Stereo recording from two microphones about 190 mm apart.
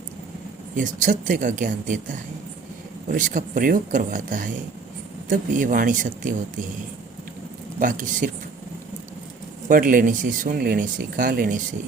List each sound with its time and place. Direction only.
0.8 s speech: 45° right (ahead or behind)
7.8 s speech: 45° right (ahead or behind)
9.6 s speech: 50° right (ahead or behind)